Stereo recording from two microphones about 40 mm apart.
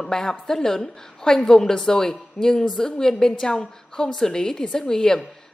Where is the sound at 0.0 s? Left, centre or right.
Centre.